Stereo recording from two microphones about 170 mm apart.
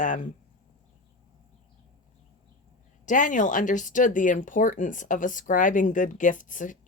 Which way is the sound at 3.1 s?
50° left (ahead or behind).